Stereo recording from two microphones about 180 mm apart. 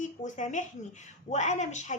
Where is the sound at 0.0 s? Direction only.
45° left (ahead or behind).